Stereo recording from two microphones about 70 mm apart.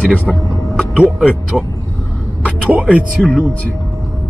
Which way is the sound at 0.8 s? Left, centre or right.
Centre.